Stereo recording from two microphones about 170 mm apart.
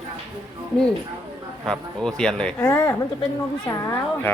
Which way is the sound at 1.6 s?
Centre (ahead or behind).